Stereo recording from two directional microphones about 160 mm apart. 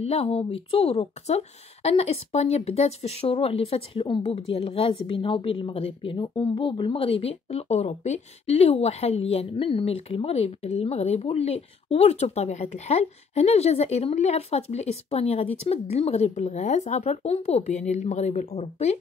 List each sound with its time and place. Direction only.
0.0 s speech: 40° left (ahead or behind)